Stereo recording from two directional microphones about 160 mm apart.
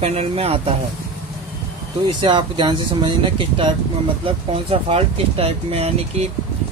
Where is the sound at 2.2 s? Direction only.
30° right (ahead or behind).